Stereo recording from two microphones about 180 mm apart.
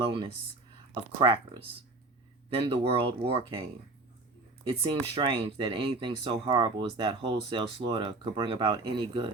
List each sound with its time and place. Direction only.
1.2 s speech: 30° right (ahead or behind)
4.7 s speech: 30° right (ahead or behind)